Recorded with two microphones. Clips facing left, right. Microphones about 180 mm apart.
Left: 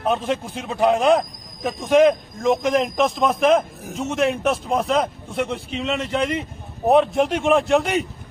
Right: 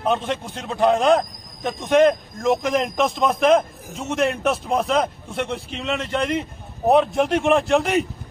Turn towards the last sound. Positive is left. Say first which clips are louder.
# even
turn(degrees=0)  # may be behind; listen again after turning